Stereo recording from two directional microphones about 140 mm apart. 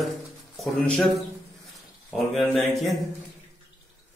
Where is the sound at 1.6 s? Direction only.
Centre (ahead or behind).